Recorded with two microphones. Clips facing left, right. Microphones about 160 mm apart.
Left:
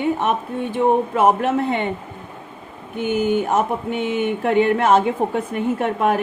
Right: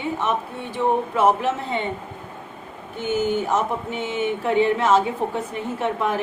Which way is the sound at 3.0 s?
55° left (ahead or behind).